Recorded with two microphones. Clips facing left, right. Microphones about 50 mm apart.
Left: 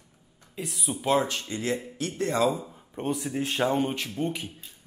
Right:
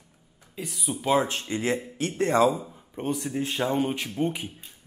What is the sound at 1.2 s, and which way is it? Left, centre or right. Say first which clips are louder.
A man's voice: right 2 dB; right.